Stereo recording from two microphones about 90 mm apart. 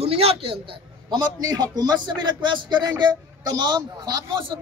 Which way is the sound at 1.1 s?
50° right (ahead or behind).